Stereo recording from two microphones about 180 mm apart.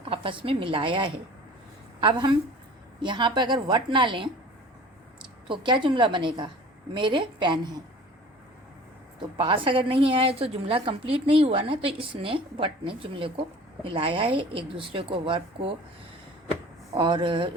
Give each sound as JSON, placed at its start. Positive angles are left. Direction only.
{"t": 0.0, "sound": "a woman's voice", "side_deg": -30}
{"t": 5.5, "sound": "a woman's voice", "side_deg": -25}
{"t": 9.4, "sound": "a woman's voice", "side_deg": -30}
{"t": 16.9, "sound": "a woman's voice", "side_deg": -30}